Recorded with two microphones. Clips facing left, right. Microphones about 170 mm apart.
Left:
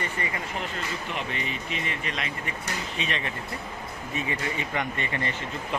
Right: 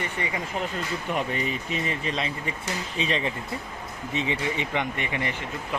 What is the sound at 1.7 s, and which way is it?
Speech, 30° right (ahead or behind).